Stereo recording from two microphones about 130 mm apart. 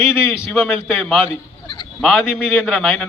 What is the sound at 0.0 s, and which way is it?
Speech, 5° right (ahead or behind).